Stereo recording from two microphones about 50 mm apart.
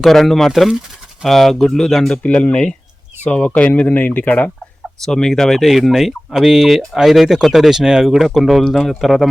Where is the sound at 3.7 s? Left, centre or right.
Left.